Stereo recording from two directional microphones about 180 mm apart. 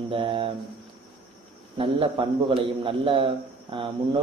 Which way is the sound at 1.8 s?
30° right (ahead or behind).